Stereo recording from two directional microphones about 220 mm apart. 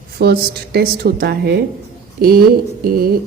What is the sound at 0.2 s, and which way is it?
A woman's voice, 45° right (ahead or behind).